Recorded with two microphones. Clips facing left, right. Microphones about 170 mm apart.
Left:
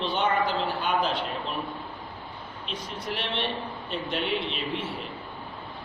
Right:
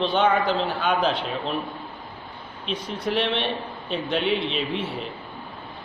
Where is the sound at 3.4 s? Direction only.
20° right (ahead or behind).